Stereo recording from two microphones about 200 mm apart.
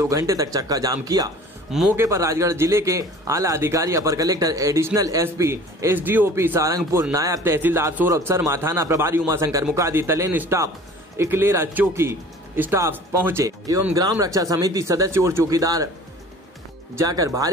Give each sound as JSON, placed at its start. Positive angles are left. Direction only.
{"t": 0.0, "sound": "a man's voice", "side_deg": -15}
{"t": 1.7, "sound": "speech", "side_deg": 0}
{"t": 2.0, "sound": "a man's voice", "side_deg": -15}
{"t": 16.9, "sound": "a man's voice", "side_deg": -15}